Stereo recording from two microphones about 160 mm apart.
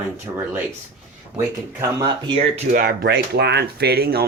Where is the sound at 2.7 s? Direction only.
65° right (ahead or behind); by 4.2 s 80° right.